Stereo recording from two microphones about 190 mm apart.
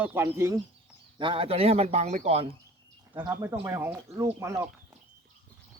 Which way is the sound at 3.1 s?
20° right (ahead or behind).